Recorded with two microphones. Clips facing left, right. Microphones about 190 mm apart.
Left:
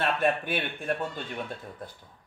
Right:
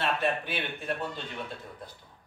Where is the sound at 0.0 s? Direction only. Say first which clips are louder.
Left 3 dB; 50° left (ahead or behind).